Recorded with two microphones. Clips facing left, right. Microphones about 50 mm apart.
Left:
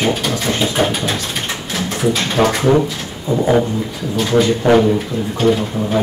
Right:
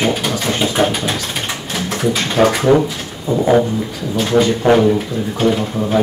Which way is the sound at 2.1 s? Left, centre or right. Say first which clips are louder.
Right 4 dB; centre.